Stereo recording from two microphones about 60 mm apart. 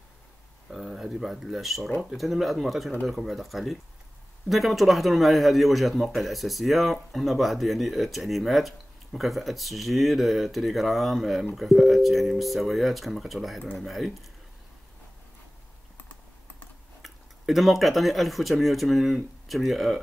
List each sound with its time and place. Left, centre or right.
0.7 s a man's voice: centre
17.0 s speech: centre